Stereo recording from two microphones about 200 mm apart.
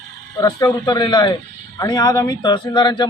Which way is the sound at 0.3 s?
20° left (ahead or behind).